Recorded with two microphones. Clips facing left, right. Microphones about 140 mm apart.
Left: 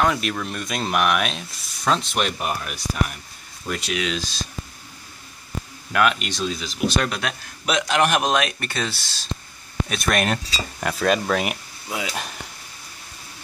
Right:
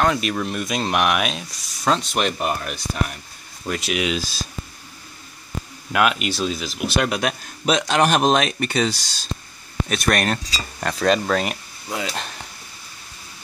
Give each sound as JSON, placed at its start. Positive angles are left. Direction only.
{"t": 0.0, "sound": "cutlery", "side_deg": 0}
{"t": 3.7, "sound": "cutlery", "side_deg": -5}
{"t": 5.9, "sound": "cutlery", "side_deg": -5}
{"t": 7.6, "sound": "speech", "side_deg": -30}
{"t": 9.8, "sound": "cutlery", "side_deg": 0}